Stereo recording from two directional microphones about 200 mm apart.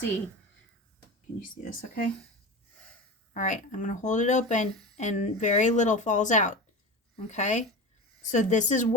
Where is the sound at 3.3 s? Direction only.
40° left (ahead or behind).